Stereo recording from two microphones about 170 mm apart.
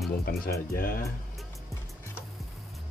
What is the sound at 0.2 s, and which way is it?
Speech, 65° left (ahead or behind).